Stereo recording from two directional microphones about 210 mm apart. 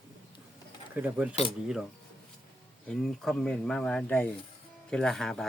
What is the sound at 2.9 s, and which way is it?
Speech, centre (ahead or behind).